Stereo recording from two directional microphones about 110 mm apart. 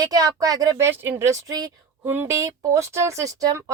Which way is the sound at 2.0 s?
20° right (ahead or behind).